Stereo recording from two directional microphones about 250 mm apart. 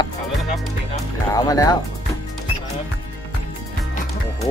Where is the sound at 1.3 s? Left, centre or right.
Centre.